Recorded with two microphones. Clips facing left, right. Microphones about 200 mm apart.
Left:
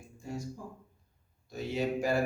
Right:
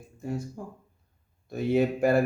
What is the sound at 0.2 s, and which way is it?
Speech, 60° right (ahead or behind).